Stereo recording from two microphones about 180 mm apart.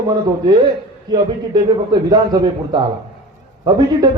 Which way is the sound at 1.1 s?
20° right (ahead or behind).